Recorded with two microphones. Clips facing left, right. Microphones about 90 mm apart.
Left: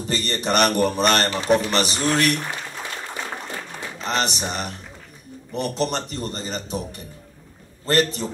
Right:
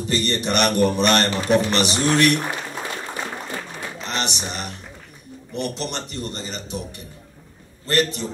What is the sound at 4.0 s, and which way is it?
A man's voice, 40° left (ahead or behind).